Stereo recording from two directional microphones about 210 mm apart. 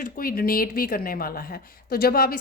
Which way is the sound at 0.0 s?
45° left (ahead or behind).